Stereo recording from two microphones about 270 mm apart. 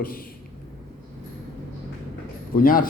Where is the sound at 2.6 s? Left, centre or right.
Left.